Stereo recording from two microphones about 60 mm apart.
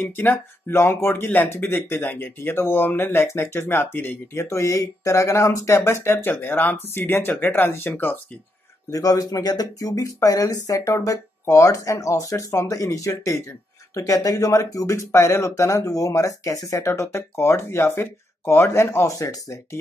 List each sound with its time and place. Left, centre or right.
0.0 s speech: left
4.5 s speech: left
5.8 s speech: left
8.9 s speech: left
15.0 s speech: left
19.0 s speech: left